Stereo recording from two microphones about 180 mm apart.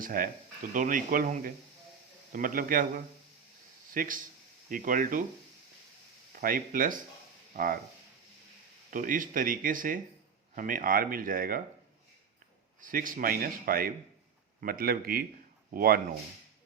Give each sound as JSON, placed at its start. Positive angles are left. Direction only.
{"t": 0.0, "sound": "speech", "side_deg": -55}
{"t": 6.3, "sound": "speech", "side_deg": -50}
{"t": 8.9, "sound": "speech", "side_deg": -50}
{"t": 12.8, "sound": "speech", "side_deg": -50}